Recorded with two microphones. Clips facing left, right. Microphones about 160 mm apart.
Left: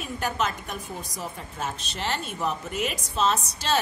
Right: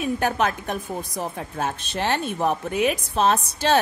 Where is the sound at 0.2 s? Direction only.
60° right (ahead or behind).